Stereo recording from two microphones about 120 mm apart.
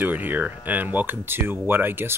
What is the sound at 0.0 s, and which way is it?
Speech, 15° right (ahead or behind).